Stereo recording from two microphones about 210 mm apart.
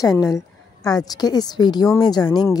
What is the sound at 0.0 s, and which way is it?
A woman's voice, 15° left (ahead or behind).